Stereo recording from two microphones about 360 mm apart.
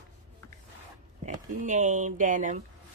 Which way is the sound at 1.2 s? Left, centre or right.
Right.